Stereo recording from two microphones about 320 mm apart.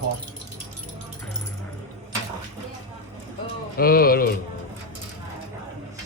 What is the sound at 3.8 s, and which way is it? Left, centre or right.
Speech, left.